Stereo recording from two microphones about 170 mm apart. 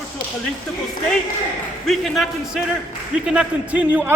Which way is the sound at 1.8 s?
Centre (ahead or behind).